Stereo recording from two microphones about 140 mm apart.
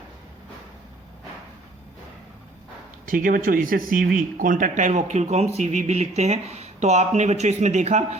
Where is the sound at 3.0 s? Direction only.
80° right.